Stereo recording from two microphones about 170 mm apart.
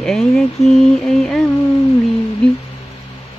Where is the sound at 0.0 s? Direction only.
Centre (ahead or behind).